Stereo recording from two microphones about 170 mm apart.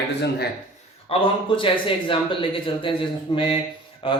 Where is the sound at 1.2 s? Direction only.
30° left (ahead or behind).